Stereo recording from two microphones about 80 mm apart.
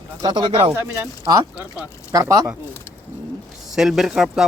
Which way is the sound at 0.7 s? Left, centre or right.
Right.